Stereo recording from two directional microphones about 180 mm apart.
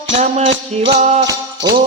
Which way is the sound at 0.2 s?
35° right (ahead or behind).